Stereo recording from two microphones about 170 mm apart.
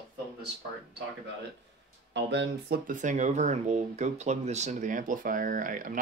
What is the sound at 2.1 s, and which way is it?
Speech, 90° right.